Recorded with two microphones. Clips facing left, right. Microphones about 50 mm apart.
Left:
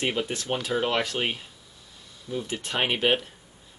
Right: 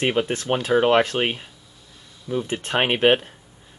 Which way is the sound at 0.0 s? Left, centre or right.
Right.